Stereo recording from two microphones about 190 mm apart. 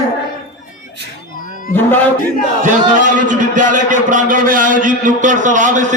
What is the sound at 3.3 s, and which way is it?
A man's voice, 45° right (ahead or behind).